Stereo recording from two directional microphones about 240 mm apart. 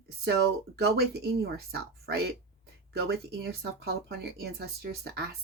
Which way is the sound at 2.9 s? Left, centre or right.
Right.